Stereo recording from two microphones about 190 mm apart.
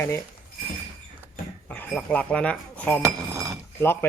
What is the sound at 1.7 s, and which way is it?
Speech, 5° left (ahead or behind).